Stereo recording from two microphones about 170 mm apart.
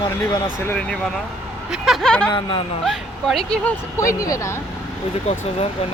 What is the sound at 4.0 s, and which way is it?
Speech, 20° left (ahead or behind).